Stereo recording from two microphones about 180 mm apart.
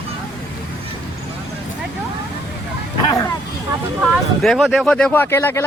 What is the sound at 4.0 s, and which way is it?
Speech, centre (ahead or behind).